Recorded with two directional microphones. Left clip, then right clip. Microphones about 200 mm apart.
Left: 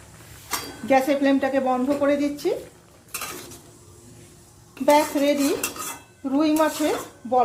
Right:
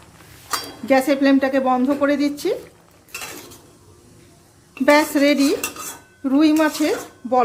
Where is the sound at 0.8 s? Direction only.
25° right (ahead or behind).